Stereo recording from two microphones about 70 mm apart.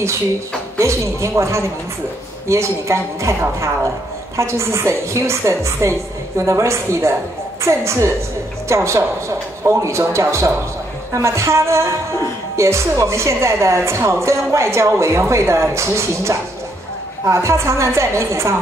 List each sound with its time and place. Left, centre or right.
0.7 s speech: right